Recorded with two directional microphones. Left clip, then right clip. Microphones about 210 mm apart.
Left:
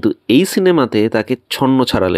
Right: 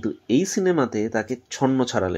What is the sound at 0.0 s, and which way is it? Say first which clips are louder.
Speech: left 9 dB; 30° left (ahead or behind).